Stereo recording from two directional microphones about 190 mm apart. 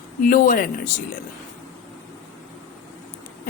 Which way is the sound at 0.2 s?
45° left (ahead or behind).